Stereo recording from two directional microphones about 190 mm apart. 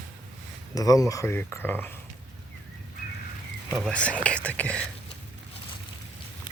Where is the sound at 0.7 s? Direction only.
20° left (ahead or behind).